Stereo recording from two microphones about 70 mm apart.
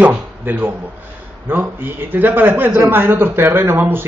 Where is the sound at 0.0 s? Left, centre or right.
Right.